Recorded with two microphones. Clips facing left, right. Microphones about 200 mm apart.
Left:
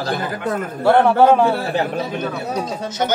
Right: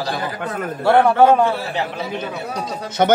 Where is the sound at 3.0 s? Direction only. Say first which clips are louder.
Right 6 dB; 55° right (ahead or behind).